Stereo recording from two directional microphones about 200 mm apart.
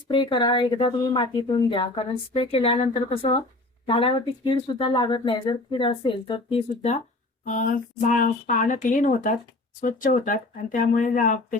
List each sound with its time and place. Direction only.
0.1 s speech: 25° left (ahead or behind); by 11.3 s 40° left (ahead or behind)